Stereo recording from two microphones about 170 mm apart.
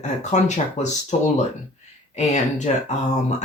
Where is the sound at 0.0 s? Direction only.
45° left (ahead or behind).